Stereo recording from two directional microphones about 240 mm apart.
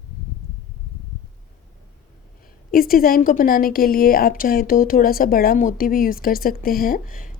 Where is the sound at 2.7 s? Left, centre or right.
Left.